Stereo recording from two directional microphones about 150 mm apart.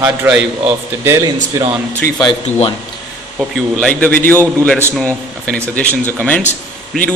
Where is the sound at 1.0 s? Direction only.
20° right (ahead or behind).